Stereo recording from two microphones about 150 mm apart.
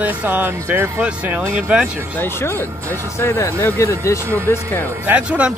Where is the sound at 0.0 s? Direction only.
10° right (ahead or behind).